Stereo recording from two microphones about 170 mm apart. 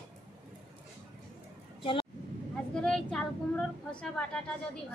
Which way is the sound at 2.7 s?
5° left (ahead or behind).